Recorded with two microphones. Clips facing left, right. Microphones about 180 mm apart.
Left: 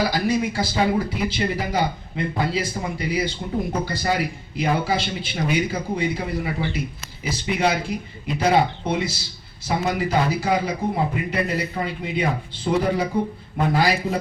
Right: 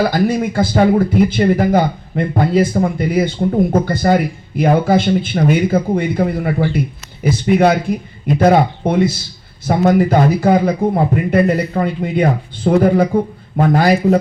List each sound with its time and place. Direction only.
0.0 s speech: 50° right (ahead or behind)